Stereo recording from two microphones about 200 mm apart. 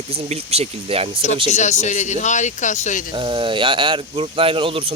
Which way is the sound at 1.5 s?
35° left (ahead or behind).